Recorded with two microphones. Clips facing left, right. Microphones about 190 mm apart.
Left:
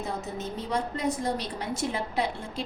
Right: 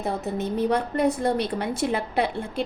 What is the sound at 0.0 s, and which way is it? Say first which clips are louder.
A woman's voice: right 6 dB; 60° right (ahead or behind).